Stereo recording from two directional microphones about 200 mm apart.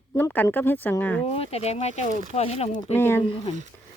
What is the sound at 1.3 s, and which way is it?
Speech, 30° left (ahead or behind).